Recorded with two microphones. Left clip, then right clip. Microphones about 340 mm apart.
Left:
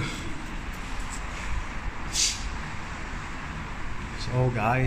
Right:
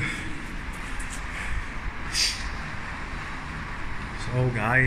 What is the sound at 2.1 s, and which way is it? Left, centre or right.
Vehicle, centre.